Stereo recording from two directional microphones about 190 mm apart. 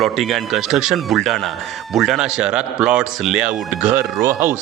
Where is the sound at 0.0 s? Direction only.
Centre (ahead or behind).